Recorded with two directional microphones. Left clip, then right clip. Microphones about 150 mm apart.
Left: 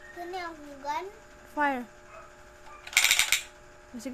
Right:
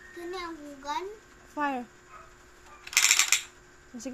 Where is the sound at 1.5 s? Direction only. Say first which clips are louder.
Left 3 dB; 20° left (ahead or behind).